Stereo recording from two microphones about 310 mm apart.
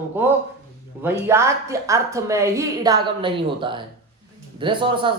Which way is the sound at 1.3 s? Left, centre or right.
Centre.